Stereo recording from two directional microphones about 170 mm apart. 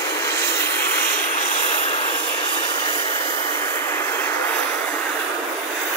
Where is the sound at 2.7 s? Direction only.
25° left (ahead or behind).